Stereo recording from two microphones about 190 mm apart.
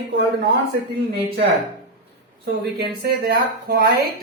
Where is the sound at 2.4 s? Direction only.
60° right (ahead or behind).